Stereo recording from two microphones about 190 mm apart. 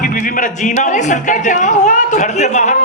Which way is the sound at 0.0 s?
45° left (ahead or behind).